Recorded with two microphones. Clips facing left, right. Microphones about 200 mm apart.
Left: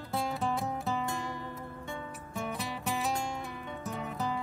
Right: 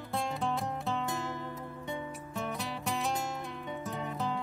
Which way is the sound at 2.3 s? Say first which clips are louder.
Left 1 dB; centre (ahead or behind).